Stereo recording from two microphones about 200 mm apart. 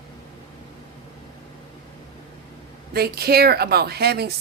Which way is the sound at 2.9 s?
50° right (ahead or behind).